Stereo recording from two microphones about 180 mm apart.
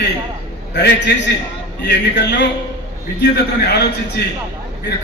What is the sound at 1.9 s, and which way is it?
A man's voice, 75° left (ahead or behind).